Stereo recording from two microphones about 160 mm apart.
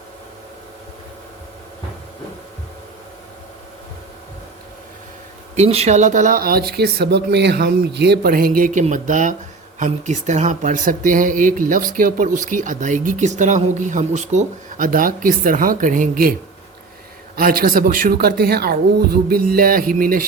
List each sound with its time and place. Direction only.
5.5 s speech: 40° right (ahead or behind); by 16.3 s 60° right (ahead or behind)
17.3 s speech: 65° right (ahead or behind)